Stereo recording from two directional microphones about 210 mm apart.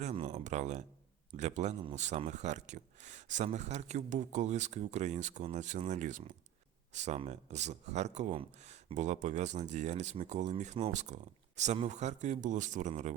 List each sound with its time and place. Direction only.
0.0 s speech: 30° right (ahead or behind)